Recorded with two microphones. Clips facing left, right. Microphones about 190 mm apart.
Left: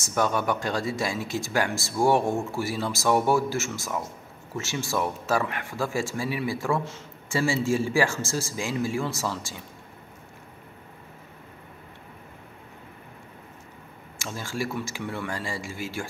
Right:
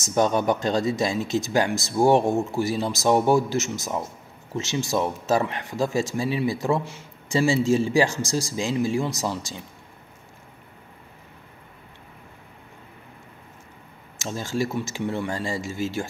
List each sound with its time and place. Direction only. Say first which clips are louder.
0.0 s speech: right 4 dB; 20° right (ahead or behind)
14.1 s speech: right 5 dB; 20° right (ahead or behind)